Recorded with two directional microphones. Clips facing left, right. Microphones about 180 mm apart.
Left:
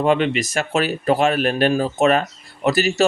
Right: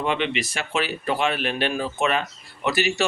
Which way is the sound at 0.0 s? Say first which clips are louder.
Left 7 dB; 45° left (ahead or behind).